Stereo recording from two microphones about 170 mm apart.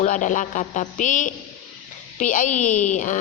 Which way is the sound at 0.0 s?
45° left (ahead or behind).